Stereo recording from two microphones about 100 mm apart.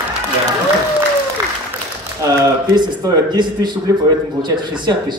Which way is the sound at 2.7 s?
45° right (ahead or behind).